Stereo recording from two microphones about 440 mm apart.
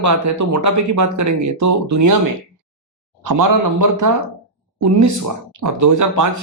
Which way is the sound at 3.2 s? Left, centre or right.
Right.